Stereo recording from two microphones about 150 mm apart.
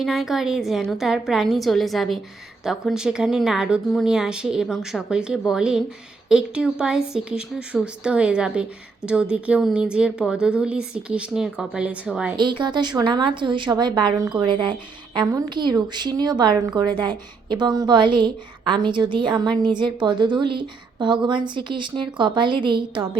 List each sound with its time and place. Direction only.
0.0 s speech: centre (ahead or behind)
12.4 s a woman's voice: 30° right (ahead or behind)